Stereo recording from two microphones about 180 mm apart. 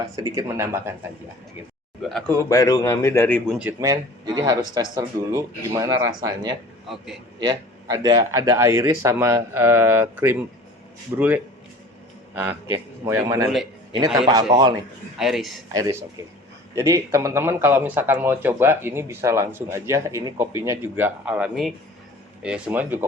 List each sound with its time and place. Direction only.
0.0 s speech: 20° right (ahead or behind)
2.0 s a man's voice: centre (ahead or behind)
2.5 s a man's voice: 20° left (ahead or behind)
3.5 s speech: 10° right (ahead or behind)
6.8 s a man's voice: 5° right (ahead or behind)
7.3 s speech: 20° right (ahead or behind)
12.3 s speech: 10° right (ahead or behind)
15.2 s a man's voice: centre (ahead or behind)
15.7 s speech: 20° right (ahead or behind)